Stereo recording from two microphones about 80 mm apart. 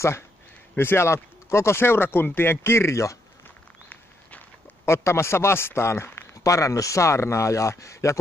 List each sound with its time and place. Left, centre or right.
0.7 s speech: left
3.4 s walk: left
4.8 s speech: left
6.4 s speech: left